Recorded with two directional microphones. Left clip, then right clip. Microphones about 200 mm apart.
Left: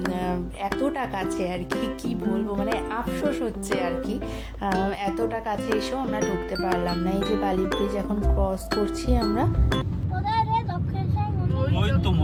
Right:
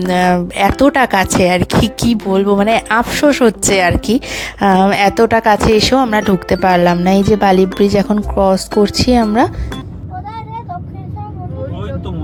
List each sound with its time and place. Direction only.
0.1 s speech: 50° right (ahead or behind)